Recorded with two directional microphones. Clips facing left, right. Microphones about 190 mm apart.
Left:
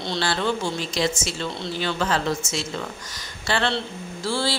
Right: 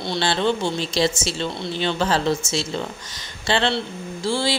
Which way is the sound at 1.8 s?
25° right (ahead or behind).